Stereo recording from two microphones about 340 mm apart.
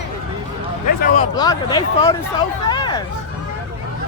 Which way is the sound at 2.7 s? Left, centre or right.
Centre.